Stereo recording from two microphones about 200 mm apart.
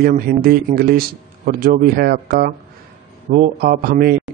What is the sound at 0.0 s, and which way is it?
A man's voice, 50° right (ahead or behind).